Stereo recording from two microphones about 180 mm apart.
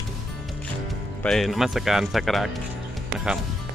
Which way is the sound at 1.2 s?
Centre (ahead or behind).